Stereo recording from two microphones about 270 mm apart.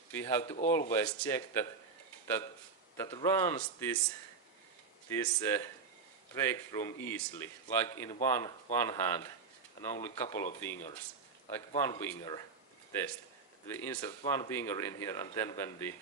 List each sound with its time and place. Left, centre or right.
0.1 s speech: centre
3.0 s speech: centre
5.0 s speech: centre